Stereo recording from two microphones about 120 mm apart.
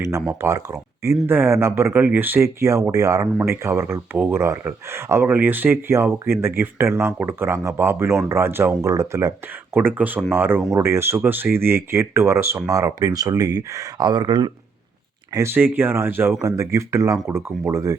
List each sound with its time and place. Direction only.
0.3 s speech: 25° right (ahead or behind)
15.3 s speech: 25° right (ahead or behind)